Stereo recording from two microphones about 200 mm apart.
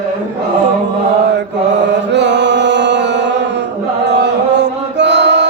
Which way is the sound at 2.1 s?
60° right (ahead or behind).